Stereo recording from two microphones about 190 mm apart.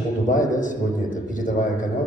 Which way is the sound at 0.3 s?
40° left (ahead or behind).